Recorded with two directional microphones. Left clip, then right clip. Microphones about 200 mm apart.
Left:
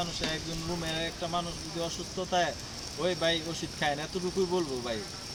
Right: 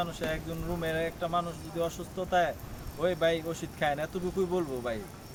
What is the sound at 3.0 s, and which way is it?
Speech, 15° right (ahead or behind).